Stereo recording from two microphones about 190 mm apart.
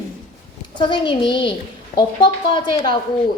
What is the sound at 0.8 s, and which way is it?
A woman's voice, 25° left (ahead or behind).